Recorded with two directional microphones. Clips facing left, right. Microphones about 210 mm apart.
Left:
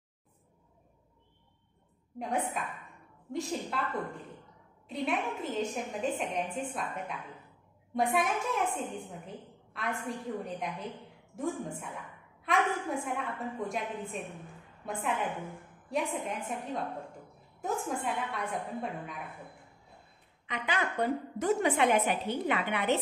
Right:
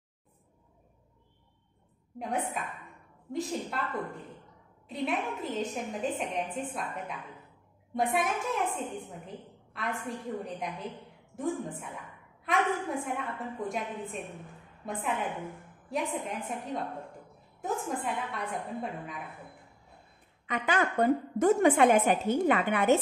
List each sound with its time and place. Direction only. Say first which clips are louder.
2.1 s a woman's voice: even; centre (ahead or behind)
20.4 s a woman's voice: right 4 dB; 45° right (ahead or behind)